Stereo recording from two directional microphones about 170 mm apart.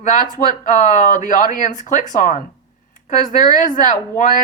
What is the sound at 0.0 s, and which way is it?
Speech, 50° left (ahead or behind).